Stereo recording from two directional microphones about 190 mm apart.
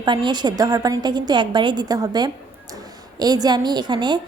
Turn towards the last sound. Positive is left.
turn(degrees=-25)  # may be behind; listen again after turning